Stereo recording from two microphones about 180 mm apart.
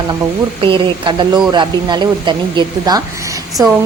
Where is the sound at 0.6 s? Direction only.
25° right (ahead or behind).